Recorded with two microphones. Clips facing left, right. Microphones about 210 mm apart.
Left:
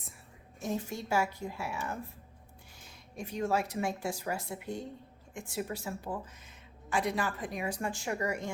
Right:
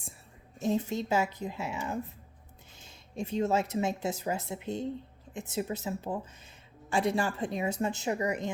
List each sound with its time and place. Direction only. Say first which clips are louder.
0.6 s a woman's voice: right 6 dB; 20° right (ahead or behind)